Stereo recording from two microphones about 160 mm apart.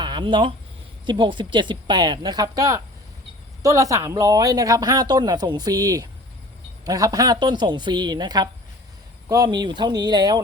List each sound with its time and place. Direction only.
0.0 s speech: 30° right (ahead or behind)